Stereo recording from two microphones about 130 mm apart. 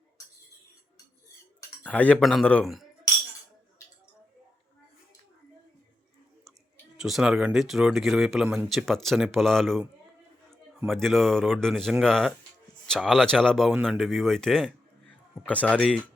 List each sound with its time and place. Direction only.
1.8 s speech: 10° left (ahead or behind)
6.9 s speech: 5° right (ahead or behind)
10.8 s speech: centre (ahead or behind)